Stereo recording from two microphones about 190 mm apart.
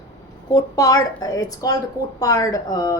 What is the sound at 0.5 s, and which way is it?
A woman's voice, 20° left (ahead or behind).